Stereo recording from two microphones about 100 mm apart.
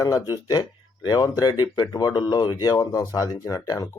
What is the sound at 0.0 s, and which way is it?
Speech, 35° left (ahead or behind).